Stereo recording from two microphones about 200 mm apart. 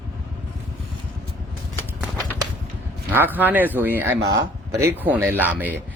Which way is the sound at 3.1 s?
10° right (ahead or behind).